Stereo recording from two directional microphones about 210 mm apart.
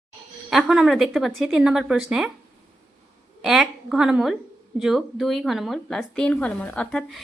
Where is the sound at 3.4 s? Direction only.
Centre (ahead or behind).